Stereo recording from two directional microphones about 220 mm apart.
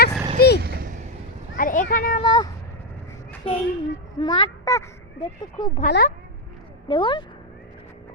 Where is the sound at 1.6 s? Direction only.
40° left (ahead or behind).